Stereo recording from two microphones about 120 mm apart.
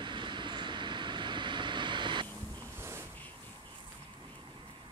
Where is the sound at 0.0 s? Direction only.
40° right (ahead or behind).